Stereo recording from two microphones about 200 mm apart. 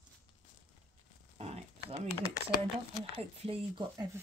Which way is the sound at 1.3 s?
30° right (ahead or behind).